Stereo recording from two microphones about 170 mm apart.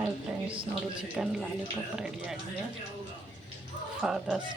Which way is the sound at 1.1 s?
5° right (ahead or behind).